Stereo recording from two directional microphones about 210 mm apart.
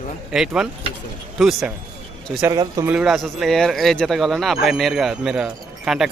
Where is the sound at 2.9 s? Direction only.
Centre (ahead or behind).